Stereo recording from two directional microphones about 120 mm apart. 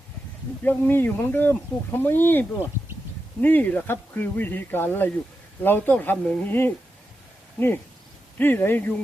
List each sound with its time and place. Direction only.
0.6 s speech: 15° left (ahead or behind)